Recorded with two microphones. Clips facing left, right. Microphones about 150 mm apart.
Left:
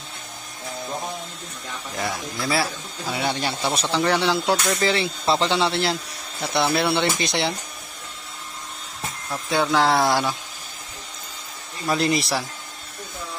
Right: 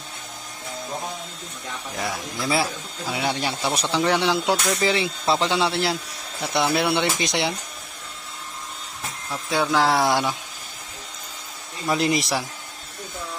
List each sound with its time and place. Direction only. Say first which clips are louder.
2.0 s speech: left 1 dB; 5° right (ahead or behind)
9.5 s speech: left 1 dB; 5° right (ahead or behind)
11.9 s speech: even; 15° right (ahead or behind)